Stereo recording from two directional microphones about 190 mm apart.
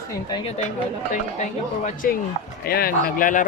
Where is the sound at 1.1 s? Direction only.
40° left (ahead or behind).